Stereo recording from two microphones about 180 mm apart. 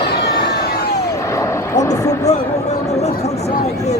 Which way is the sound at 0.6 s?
60° left (ahead or behind).